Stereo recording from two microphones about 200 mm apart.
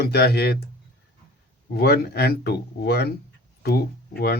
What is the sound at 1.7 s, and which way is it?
Speech, 50° left (ahead or behind).